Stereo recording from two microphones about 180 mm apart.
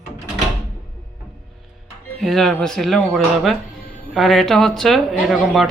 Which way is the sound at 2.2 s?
Centre (ahead or behind).